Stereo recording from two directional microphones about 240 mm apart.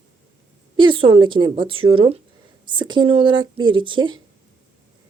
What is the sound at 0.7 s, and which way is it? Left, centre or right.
Speech, right.